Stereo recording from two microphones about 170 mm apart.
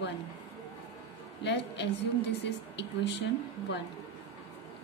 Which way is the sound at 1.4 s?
90° left.